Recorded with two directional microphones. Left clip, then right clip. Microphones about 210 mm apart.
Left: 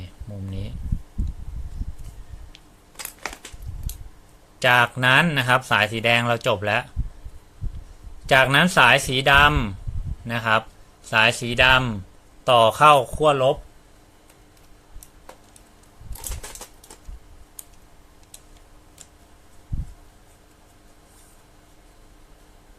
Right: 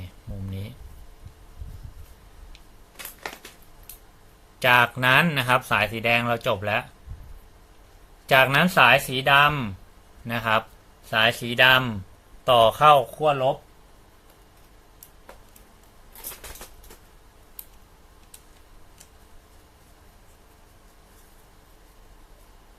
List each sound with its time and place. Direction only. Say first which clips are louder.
4.6 s speech: left 1 dB; 15° left (ahead or behind)
8.3 s speech: left 2 dB; 15° left (ahead or behind); by 13.6 s 35° left (ahead or behind)